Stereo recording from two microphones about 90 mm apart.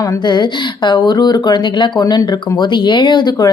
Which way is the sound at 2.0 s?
50° left (ahead or behind).